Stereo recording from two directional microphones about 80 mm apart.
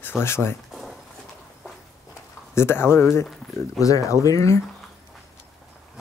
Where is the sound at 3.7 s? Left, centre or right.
Left.